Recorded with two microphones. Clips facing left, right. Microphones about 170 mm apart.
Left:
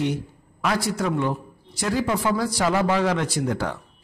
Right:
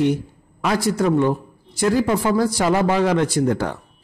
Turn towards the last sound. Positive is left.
turn(degrees=-50)  # may be behind; listen again after turning